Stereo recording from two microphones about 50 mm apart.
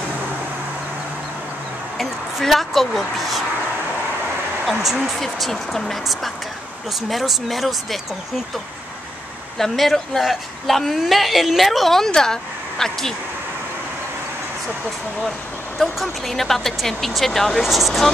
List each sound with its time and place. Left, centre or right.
2.0 s speech: centre
4.7 s speech: centre
5.2 s speech: centre
9.6 s speech: centre
15.8 s speech: centre